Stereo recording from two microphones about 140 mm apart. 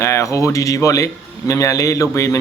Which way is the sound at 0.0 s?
20° left (ahead or behind).